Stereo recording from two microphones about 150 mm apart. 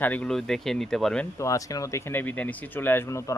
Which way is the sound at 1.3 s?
20° left (ahead or behind).